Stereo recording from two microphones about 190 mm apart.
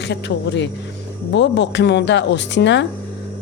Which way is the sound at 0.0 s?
65° left (ahead or behind).